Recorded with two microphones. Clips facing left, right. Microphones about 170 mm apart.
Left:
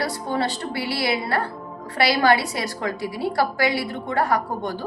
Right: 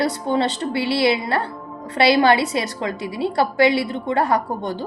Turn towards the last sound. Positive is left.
turn(degrees=-25)  # may be behind; listen again after turning